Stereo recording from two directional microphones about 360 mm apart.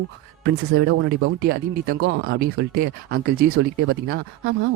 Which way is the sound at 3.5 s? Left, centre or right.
Right.